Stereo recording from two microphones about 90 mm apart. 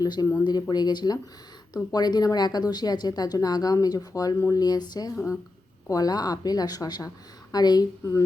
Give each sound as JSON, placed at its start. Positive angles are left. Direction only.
{"t": 0.0, "sound": "speech", "side_deg": 45}